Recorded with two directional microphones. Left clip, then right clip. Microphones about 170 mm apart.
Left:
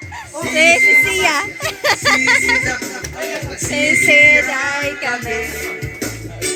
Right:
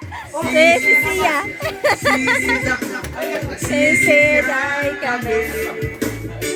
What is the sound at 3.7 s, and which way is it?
Speech, 5° right (ahead or behind).